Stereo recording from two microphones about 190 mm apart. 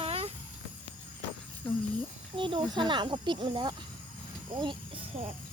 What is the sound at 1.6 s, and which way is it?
Speech, 5° left (ahead or behind).